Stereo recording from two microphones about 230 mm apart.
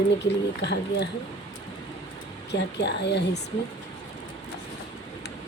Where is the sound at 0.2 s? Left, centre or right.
Left.